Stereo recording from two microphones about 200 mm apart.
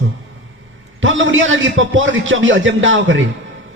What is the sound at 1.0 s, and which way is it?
A man's voice, 70° right (ahead or behind).